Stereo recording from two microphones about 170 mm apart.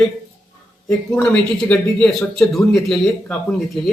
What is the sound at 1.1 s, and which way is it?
Speech, 5° left (ahead or behind).